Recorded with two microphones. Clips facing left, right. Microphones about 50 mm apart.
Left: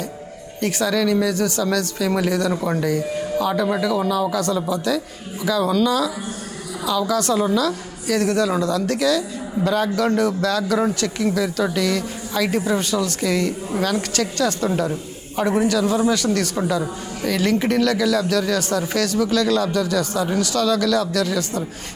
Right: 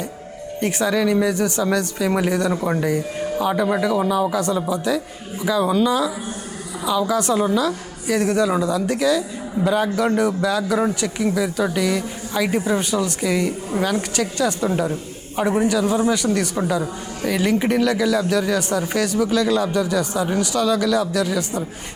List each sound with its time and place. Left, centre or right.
0.6 s speech: right
7.1 s speech: right
10.6 s speech: centre